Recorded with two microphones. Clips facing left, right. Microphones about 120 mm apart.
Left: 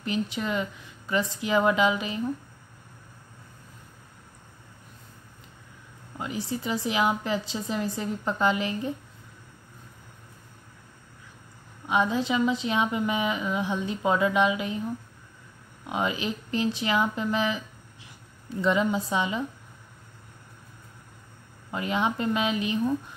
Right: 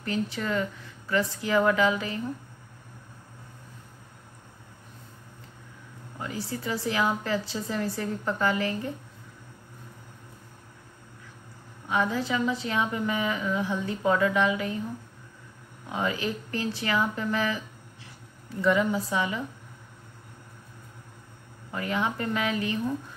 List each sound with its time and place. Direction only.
0.0 s a woman's voice: 20° left (ahead or behind)
6.1 s a woman's voice: 20° left (ahead or behind)
11.9 s a woman's voice: 20° left (ahead or behind)
15.9 s a woman's voice: 20° left (ahead or behind)
18.6 s a woman's voice: 20° left (ahead or behind)
21.7 s a woman's voice: 20° left (ahead or behind)